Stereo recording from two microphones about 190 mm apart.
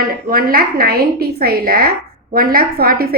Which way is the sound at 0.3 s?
50° right (ahead or behind).